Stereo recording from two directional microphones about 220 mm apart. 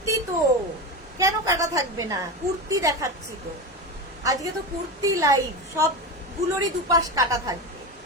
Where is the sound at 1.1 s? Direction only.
15° right (ahead or behind).